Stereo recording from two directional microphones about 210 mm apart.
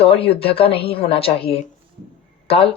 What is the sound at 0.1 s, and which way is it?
A woman's voice, 25° left (ahead or behind).